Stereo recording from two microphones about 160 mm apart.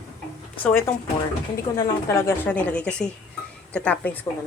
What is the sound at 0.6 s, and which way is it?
Speech, 10° left (ahead or behind).